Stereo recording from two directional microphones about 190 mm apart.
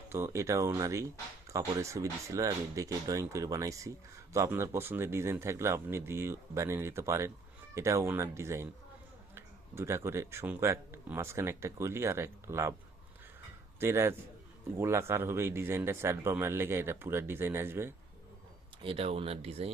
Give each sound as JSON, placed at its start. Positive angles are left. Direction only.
{"t": 0.1, "sound": "speech", "side_deg": -15}
{"t": 13.7, "sound": "a man's voice", "side_deg": -15}
{"t": 18.8, "sound": "speech", "side_deg": -30}